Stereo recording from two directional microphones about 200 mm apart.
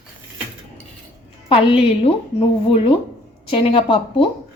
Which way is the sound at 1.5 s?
30° left (ahead or behind).